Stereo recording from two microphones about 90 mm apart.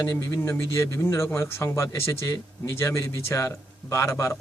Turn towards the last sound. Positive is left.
turn(degrees=30)  # may be behind; listen again after turning